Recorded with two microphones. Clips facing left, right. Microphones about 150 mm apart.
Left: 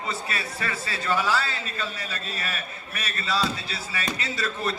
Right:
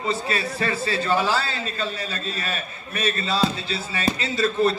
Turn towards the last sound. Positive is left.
turn(degrees=-30)  # may be behind; listen again after turning